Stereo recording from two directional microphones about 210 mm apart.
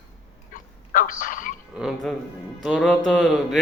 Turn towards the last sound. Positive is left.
turn(degrees=0)  # may be behind; listen again after turning